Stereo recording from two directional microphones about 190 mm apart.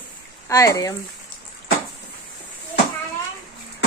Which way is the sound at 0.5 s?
15° left (ahead or behind).